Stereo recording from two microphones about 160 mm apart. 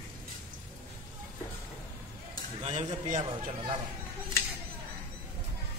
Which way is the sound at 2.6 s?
40° right (ahead or behind).